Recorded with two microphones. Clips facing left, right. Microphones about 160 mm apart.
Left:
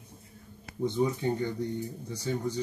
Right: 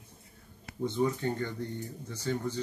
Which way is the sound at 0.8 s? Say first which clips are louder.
Left 2 dB; 15° left (ahead or behind).